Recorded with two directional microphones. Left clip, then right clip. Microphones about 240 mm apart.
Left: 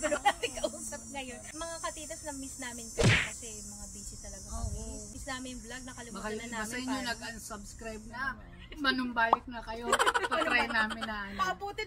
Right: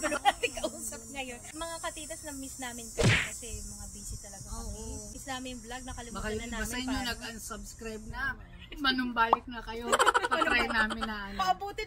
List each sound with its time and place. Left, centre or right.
0.2 s a sound: centre
3.0 s whip: centre
5.3 s speech: centre